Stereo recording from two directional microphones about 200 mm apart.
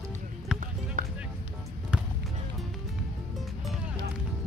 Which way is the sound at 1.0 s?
40° right (ahead or behind).